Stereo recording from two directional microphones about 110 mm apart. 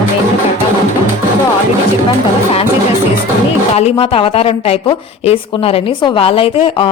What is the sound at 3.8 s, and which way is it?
A woman's voice, 65° left (ahead or behind).